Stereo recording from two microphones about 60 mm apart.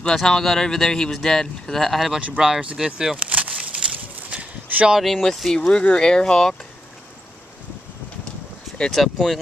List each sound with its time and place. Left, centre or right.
0.0 s speech: centre
2.1 s speech: centre
2.8 s speech: centre
3.2 s a sound: right
4.9 s speech: centre
8.9 s speech: centre